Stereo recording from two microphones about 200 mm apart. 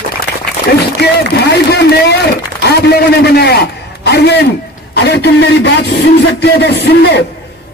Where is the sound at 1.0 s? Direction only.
55° left (ahead or behind).